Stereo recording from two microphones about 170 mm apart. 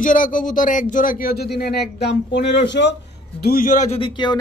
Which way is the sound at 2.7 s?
90° left.